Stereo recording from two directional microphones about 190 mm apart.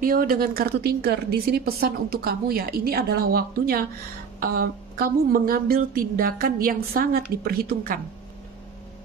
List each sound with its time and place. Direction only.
0.0 s speech: 50° right (ahead or behind)